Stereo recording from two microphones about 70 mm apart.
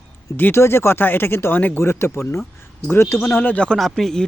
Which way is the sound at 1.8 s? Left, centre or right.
Left.